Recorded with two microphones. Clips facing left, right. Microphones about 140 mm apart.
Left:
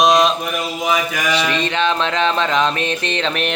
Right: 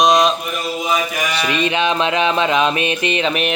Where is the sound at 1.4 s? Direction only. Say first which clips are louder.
Right 1 dB; 15° right (ahead or behind).